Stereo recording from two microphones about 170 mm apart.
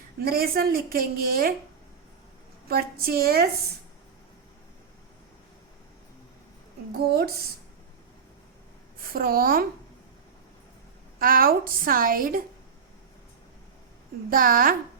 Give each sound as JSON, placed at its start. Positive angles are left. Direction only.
{"t": 0.3, "sound": "a woman's voice", "side_deg": -60}
{"t": 2.6, "sound": "a woman's voice", "side_deg": -60}
{"t": 9.0, "sound": "a woman's voice", "side_deg": -60}
{"t": 11.2, "sound": "a woman's voice", "side_deg": -55}
{"t": 14.3, "sound": "a woman's voice", "side_deg": -55}